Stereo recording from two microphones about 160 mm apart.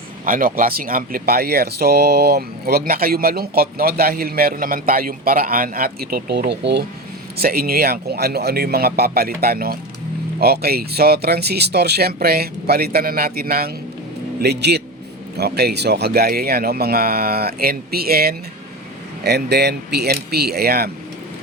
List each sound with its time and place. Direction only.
0.3 s speech: 60° right (ahead or behind); by 6.4 s 80° right
6.6 s a man's voice: 90° right
7.3 s speech: 70° right (ahead or behind)
14.4 s a man's voice: 90° right; by 18.3 s 70° right (ahead or behind)
19.2 s speech: 90° right